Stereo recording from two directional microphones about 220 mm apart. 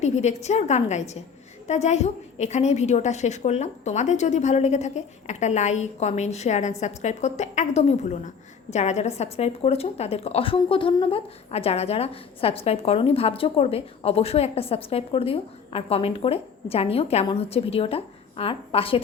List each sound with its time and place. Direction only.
0.0 s a woman's voice: 30° left (ahead or behind)